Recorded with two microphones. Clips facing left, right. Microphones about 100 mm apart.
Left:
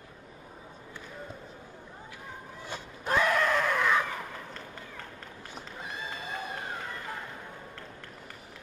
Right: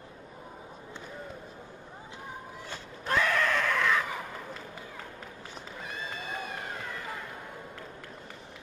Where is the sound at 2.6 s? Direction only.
15° left (ahead or behind).